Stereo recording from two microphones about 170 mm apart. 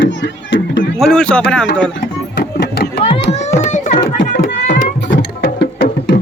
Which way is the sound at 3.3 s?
40° left (ahead or behind).